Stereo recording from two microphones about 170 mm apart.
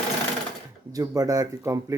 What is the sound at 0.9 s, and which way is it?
Speech, 20° right (ahead or behind).